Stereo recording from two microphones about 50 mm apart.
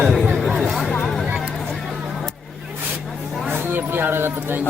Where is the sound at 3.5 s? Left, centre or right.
Right.